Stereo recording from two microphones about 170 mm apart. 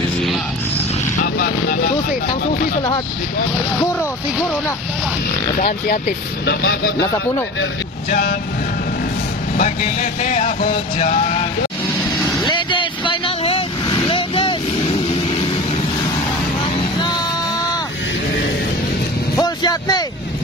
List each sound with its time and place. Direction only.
1.2 s vehicle: 60° left (ahead or behind)
5.9 s speech: 65° left (ahead or behind)
8.1 s speech: 65° left (ahead or behind)
9.6 s vehicle: 50° left (ahead or behind)
12.3 s vehicle: 25° left (ahead or behind)
19.3 s vehicle: 20° left (ahead or behind)